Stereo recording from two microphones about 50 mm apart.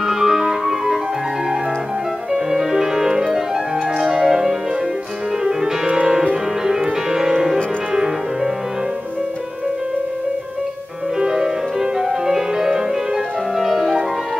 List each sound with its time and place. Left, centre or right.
0.0 s music: centre
2.3 s music: centre
5.9 s music: right
6.6 s music: centre
11.1 s music: centre